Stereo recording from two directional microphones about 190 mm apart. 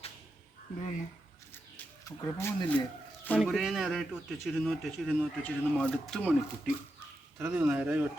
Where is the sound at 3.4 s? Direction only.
Centre (ahead or behind).